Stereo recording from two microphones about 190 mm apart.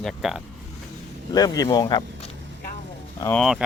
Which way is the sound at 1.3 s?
20° left (ahead or behind).